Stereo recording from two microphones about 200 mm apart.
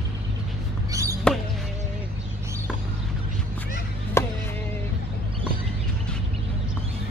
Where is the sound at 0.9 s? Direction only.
15° right (ahead or behind).